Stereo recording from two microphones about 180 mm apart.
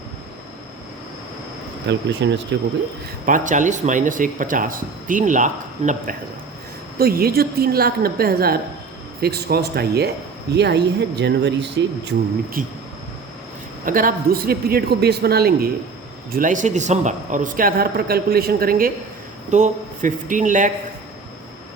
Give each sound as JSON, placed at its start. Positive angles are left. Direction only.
{"t": 1.9, "sound": "speech", "side_deg": -75}
{"t": 3.2, "sound": "speech", "side_deg": -45}
{"t": 7.0, "sound": "a man's voice", "side_deg": -55}
{"t": 12.6, "sound": "speech", "side_deg": -50}
{"t": 13.8, "sound": "a man's voice", "side_deg": -50}
{"t": 16.3, "sound": "speech", "side_deg": -45}
{"t": 19.5, "sound": "speech", "side_deg": -40}